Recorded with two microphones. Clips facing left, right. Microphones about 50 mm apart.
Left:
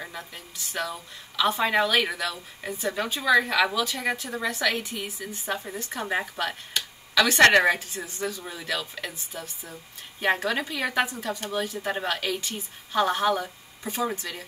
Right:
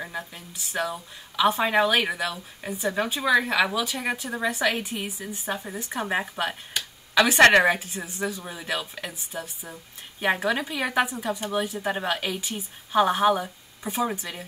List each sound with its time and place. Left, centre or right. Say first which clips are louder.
1.3 s a woman's voice: right 2 dB; centre
8.4 s a woman's voice: right 1 dB; right